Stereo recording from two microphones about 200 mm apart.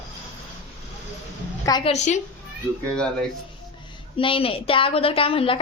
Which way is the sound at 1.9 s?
35° left (ahead or behind).